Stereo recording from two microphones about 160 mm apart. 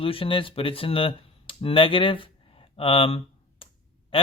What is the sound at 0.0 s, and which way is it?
Speech, 35° left (ahead or behind).